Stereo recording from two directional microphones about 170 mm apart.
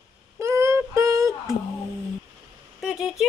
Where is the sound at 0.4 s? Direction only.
15° right (ahead or behind).